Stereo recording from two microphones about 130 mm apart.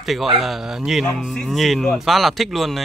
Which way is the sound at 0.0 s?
Centre (ahead or behind).